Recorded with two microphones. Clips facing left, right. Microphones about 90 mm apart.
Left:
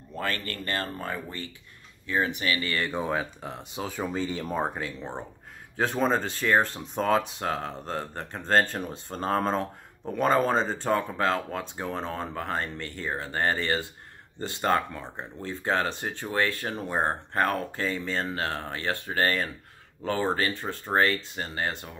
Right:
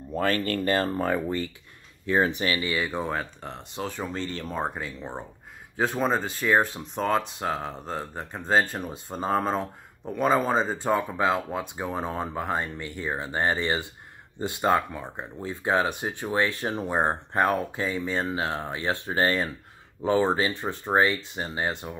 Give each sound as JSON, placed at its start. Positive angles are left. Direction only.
{"t": 0.1, "sound": "speech", "side_deg": -35}
{"t": 2.6, "sound": "speech", "side_deg": -10}
{"t": 2.9, "sound": "speech", "side_deg": 0}
{"t": 4.6, "sound": "speech", "side_deg": -5}